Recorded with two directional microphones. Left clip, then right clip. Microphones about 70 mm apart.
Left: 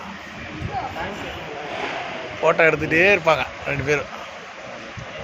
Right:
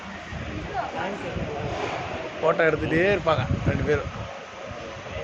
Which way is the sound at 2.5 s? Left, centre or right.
Left.